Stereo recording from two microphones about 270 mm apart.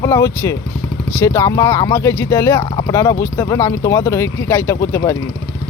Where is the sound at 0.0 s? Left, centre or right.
Centre.